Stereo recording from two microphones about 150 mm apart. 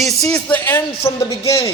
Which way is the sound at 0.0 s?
5° left (ahead or behind).